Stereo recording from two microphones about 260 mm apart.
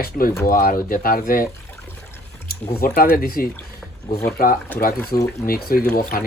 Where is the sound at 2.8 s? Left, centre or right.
Left.